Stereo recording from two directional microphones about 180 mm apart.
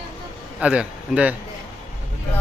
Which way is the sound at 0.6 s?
5° right (ahead or behind).